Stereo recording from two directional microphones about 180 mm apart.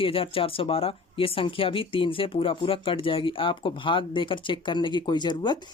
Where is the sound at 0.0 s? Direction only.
30° left (ahead or behind).